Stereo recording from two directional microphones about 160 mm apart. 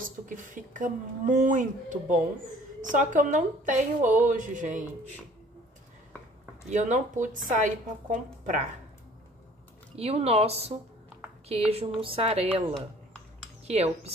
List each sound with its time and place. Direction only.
0.0 s speech: 55° right (ahead or behind)
6.7 s speech: 50° right (ahead or behind)
9.9 s speech: 40° right (ahead or behind)
13.7 s speech: 40° right (ahead or behind)